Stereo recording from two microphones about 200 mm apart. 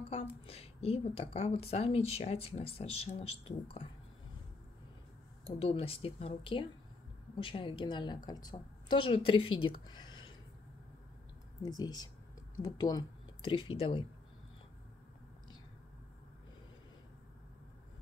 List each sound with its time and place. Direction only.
0.1 s a woman's voice: 30° left (ahead or behind)
5.6 s a woman's voice: 30° left (ahead or behind)
11.6 s a woman's voice: 20° left (ahead or behind)